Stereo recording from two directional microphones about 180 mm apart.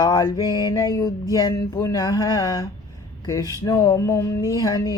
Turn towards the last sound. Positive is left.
turn(degrees=20)  # may be behind; listen again after turning